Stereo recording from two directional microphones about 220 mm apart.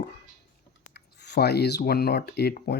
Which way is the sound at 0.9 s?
50° left (ahead or behind).